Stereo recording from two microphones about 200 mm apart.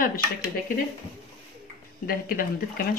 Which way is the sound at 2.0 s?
45° left (ahead or behind).